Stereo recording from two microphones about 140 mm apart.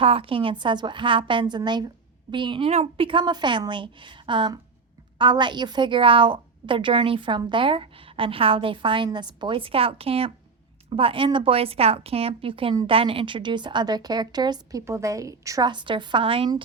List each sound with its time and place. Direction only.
0.0 s a woman's voice: 40° right (ahead or behind)